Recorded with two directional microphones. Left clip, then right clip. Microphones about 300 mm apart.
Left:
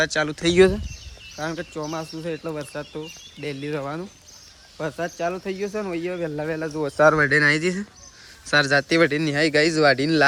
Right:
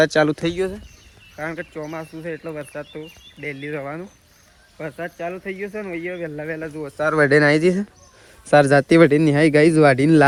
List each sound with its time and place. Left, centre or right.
0.0 s speech: centre
0.5 s speech: left
1.4 s speech: centre
6.8 s speech: left
7.1 s speech: centre